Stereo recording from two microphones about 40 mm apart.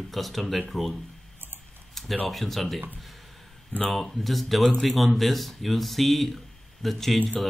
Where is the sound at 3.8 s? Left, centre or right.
Centre.